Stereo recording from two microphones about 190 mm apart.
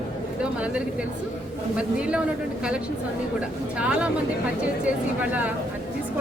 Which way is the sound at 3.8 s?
5° right (ahead or behind).